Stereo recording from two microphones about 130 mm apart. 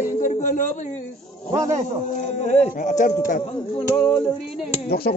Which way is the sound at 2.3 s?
60° left (ahead or behind).